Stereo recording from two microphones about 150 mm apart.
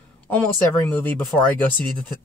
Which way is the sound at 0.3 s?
10° left (ahead or behind).